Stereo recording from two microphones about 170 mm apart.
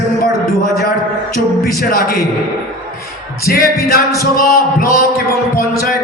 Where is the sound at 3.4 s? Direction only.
60° left (ahead or behind).